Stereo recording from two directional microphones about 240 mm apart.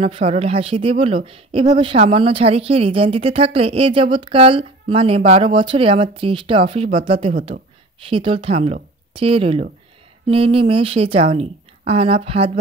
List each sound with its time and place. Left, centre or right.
0.0 s speech: right